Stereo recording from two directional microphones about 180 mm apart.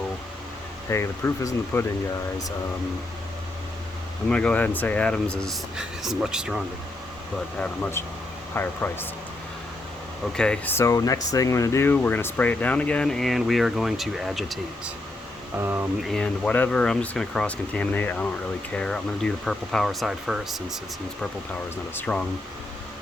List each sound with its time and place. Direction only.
0.9 s speech: 15° left (ahead or behind)
4.3 s speech: 5° left (ahead or behind)
7.6 s speech: 10° left (ahead or behind)
10.3 s speech: 5° left (ahead or behind)
15.5 s speech: 15° right (ahead or behind)
16.0 s speech: 5° left (ahead or behind)